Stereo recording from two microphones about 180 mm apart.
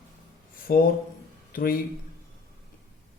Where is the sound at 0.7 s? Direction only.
55° left (ahead or behind).